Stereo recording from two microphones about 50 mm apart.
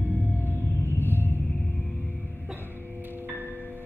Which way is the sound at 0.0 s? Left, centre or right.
Right.